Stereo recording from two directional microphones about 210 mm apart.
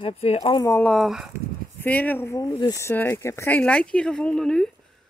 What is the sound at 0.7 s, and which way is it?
Speech, 10° left (ahead or behind).